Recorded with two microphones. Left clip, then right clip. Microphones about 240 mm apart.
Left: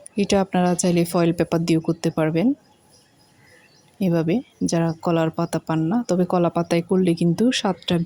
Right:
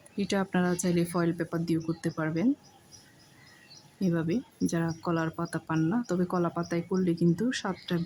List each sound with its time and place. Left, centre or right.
0.2 s speech: left
4.0 s speech: left